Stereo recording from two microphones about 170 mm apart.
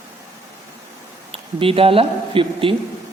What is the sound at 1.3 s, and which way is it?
Speech, 35° right (ahead or behind).